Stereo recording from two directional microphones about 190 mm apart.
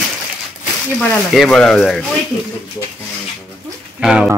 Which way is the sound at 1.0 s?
Centre (ahead or behind).